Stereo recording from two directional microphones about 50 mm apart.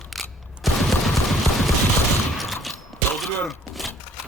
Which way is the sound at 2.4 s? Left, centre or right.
Centre.